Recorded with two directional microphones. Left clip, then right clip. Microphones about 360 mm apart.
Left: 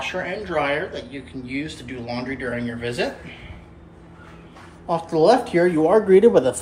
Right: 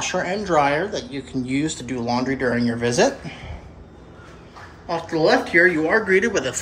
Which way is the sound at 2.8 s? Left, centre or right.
Centre.